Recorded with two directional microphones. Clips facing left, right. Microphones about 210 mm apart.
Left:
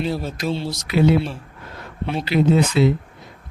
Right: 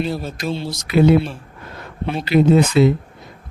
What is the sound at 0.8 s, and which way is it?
Speech, 50° right (ahead or behind).